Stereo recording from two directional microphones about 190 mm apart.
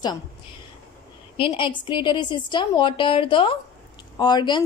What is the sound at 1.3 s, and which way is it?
A woman's voice, 25° left (ahead or behind).